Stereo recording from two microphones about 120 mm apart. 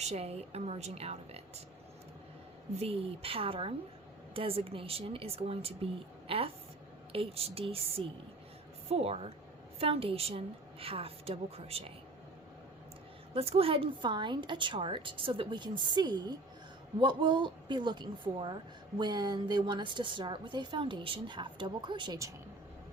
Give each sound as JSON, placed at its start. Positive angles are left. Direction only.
{"t": 0.0, "sound": "a woman's voice", "side_deg": -60}
{"t": 2.7, "sound": "a woman's voice", "side_deg": -55}
{"t": 13.3, "sound": "a woman's voice", "side_deg": -55}